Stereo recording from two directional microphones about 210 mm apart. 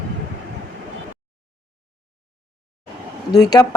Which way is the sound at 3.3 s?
20° left (ahead or behind).